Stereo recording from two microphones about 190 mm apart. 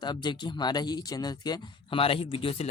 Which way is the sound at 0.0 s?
25° left (ahead or behind).